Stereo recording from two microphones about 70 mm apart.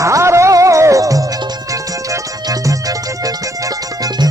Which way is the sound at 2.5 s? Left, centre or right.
Right.